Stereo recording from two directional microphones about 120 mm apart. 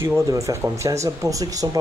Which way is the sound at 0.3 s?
25° right (ahead or behind).